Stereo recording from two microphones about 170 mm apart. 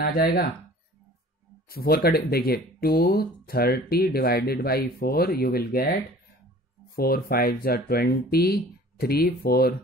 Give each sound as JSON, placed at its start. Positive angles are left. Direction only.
{"t": 0.0, "sound": "speech", "side_deg": 65}
{"t": 1.7, "sound": "speech", "side_deg": 60}
{"t": 7.0, "sound": "speech", "side_deg": 65}